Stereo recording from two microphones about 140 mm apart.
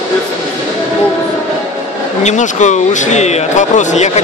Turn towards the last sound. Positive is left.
turn(degrees=55)  # may be behind; listen again after turning